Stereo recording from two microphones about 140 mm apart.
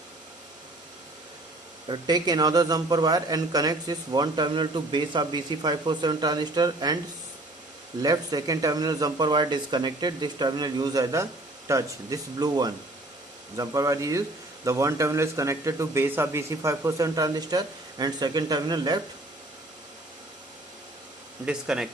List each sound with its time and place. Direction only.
1.9 s speech: 30° right (ahead or behind)
8.0 s speech: 25° right (ahead or behind)
21.4 s speech: 5° right (ahead or behind)